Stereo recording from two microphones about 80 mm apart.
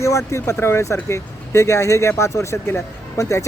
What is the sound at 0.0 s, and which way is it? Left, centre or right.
Speech, left.